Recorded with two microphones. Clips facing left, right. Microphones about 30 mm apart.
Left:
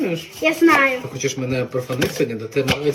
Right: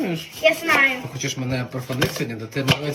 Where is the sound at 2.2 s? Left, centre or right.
Centre.